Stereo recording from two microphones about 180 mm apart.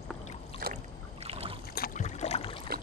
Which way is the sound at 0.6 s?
55° right (ahead or behind).